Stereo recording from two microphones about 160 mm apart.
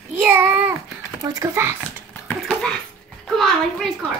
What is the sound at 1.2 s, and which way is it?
Speech, 20° right (ahead or behind).